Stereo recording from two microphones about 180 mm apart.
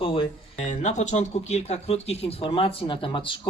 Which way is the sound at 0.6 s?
40° left (ahead or behind).